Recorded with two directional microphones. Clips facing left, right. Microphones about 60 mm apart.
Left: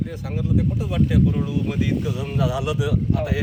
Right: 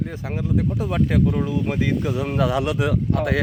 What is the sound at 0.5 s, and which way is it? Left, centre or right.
Speech, right.